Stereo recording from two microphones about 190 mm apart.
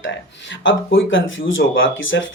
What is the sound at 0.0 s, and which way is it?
Speech, 75° left (ahead or behind).